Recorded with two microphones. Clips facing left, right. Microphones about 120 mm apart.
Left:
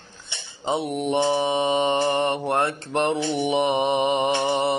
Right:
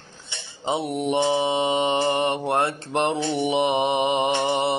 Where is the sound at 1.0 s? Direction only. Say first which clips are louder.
Right 1 dB; 20° right (ahead or behind).